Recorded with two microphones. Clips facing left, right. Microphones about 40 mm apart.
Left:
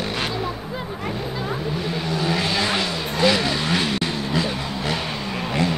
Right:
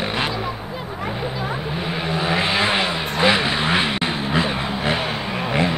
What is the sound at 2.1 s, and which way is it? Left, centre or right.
Vehicle, right.